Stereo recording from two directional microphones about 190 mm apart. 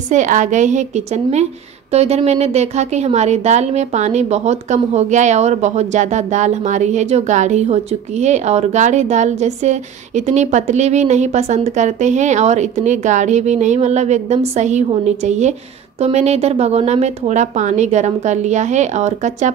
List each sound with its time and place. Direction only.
0.1 s a woman's voice: 40° right (ahead or behind)